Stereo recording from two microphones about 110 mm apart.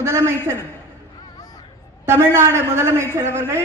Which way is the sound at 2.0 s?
25° right (ahead or behind).